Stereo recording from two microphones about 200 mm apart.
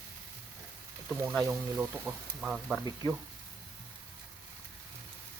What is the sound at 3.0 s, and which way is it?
Speech, 20° left (ahead or behind).